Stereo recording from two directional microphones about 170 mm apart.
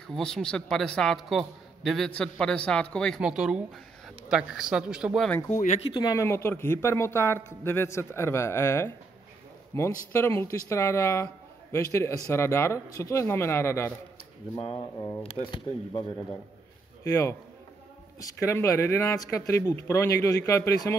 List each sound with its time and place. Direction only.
0.0 s a man's voice: 5° left (ahead or behind)
5.5 s speech: 45° left (ahead or behind)
5.9 s a man's voice: 25° left (ahead or behind)
14.5 s speech: 30° left (ahead or behind)
15.0 s a man's voice: 15° left (ahead or behind)
15.3 s a man's voice: 30° left (ahead or behind)